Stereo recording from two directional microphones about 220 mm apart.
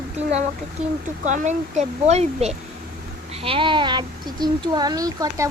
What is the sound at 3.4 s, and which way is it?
Speech, 25° right (ahead or behind).